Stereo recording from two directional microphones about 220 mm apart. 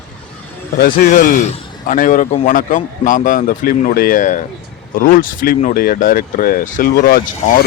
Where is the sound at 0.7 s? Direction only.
40° left (ahead or behind).